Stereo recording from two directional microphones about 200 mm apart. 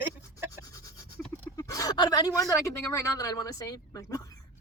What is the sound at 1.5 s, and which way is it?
Speech, 15° left (ahead or behind).